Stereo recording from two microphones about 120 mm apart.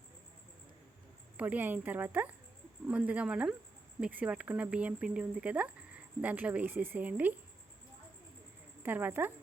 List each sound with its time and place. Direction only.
1.4 s speech: 15° right (ahead or behind)
8.8 s speech: 15° right (ahead or behind)